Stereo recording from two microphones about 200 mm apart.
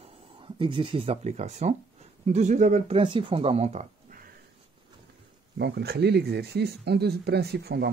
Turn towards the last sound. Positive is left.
turn(degrees=-55)  # may be behind; listen again after turning